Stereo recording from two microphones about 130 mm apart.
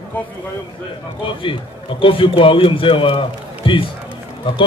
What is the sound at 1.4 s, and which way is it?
A man's voice, 40° left (ahead or behind).